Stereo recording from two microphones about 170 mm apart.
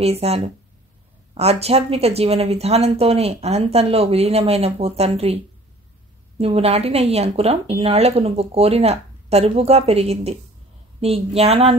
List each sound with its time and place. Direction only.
0.0 s speech: 35° right (ahead or behind)